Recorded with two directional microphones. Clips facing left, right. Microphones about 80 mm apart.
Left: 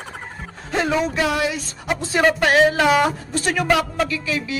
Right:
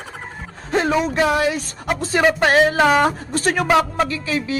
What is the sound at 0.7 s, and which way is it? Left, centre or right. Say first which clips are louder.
Speech: right 2 dB; right.